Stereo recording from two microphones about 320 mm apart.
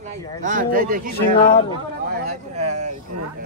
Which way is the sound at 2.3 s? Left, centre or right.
Right.